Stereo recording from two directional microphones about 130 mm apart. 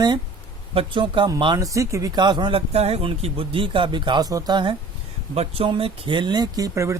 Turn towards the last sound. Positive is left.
turn(degrees=-20)  # may be behind; listen again after turning